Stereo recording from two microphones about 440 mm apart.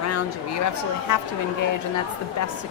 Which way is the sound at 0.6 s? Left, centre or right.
Left.